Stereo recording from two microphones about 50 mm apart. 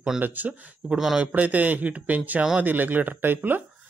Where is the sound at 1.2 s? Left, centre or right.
Right.